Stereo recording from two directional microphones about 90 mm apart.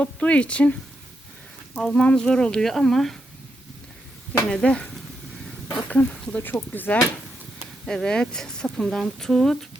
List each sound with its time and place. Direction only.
0.0 s speech: 15° left (ahead or behind)
1.8 s speech: 10° left (ahead or behind)
4.4 s speech: 10° left (ahead or behind)
5.9 s speech: 15° left (ahead or behind)
7.9 s speech: 10° left (ahead or behind)